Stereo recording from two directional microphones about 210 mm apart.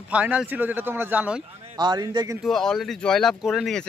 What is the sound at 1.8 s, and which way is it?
Speech, 20° right (ahead or behind).